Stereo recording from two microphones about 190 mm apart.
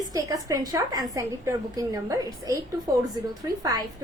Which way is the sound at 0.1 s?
20° right (ahead or behind).